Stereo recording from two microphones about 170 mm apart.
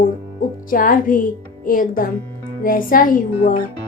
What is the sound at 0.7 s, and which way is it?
A woman's voice, 55° left (ahead or behind).